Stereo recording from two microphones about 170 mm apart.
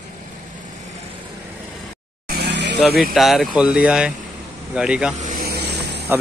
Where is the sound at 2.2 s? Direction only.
85° right.